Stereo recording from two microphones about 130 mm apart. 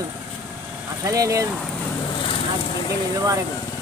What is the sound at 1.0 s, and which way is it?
Speech, 25° right (ahead or behind).